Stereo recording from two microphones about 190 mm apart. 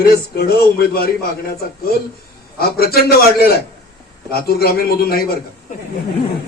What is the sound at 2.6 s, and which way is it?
A man's voice, 55° left (ahead or behind).